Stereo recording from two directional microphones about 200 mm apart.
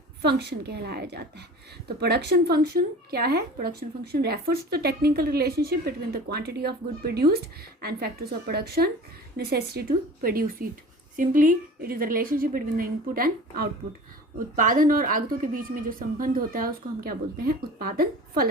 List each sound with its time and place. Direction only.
0.3 s a woman's voice: 55° right (ahead or behind)